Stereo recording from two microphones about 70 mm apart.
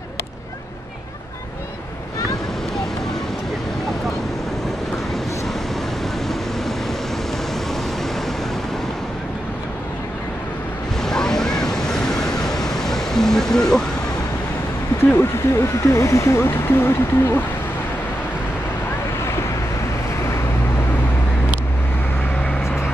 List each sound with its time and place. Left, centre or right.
11.0 s waves: centre
15.0 s speech: left